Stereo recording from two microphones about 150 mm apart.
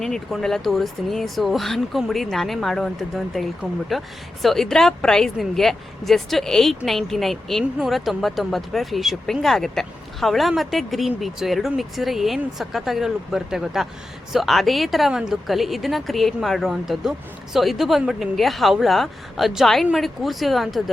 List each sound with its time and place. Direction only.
0.0 s a woman's voice: centre (ahead or behind)